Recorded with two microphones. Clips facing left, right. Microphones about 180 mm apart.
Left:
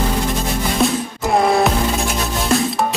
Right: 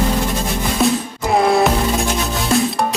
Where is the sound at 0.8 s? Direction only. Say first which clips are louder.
Right 2 dB; centre (ahead or behind).